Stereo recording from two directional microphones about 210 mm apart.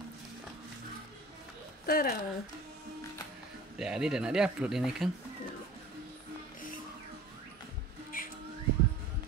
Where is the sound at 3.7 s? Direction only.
5° right (ahead or behind).